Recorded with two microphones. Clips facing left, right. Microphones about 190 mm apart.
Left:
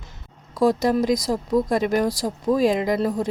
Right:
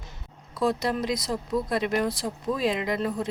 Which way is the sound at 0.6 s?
45° left (ahead or behind).